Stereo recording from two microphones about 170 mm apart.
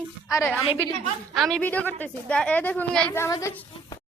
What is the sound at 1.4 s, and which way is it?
Speech, 5° left (ahead or behind).